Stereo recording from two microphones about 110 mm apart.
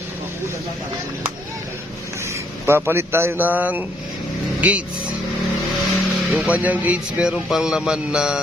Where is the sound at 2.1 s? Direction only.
25° right (ahead or behind).